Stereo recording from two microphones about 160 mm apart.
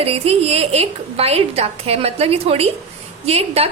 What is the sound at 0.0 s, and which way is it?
A woman's voice, 40° right (ahead or behind).